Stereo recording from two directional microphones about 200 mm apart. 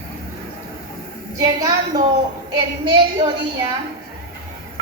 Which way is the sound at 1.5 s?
20° right (ahead or behind).